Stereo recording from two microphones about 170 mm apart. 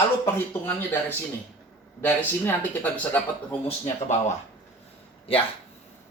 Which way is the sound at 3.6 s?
40° left (ahead or behind).